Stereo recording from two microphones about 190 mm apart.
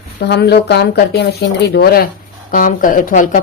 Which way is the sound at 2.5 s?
45° left (ahead or behind).